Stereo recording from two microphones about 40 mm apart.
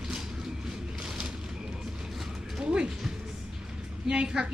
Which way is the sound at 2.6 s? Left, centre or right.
Centre.